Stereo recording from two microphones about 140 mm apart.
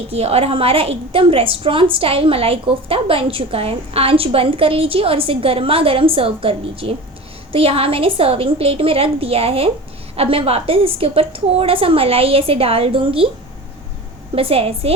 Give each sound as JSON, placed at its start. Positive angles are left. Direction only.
{"t": 0.1, "sound": "a woman's voice", "side_deg": -45}
{"t": 14.3, "sound": "a woman's voice", "side_deg": -45}